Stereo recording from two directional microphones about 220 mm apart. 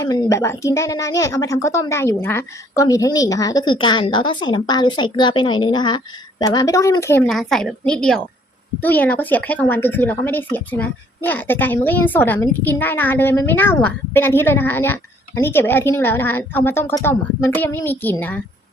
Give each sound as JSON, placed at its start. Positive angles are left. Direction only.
{"t": 0.0, "sound": "a woman's voice", "side_deg": 15}